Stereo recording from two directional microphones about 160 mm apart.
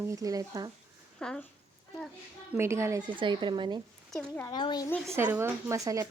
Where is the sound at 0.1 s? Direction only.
20° right (ahead or behind).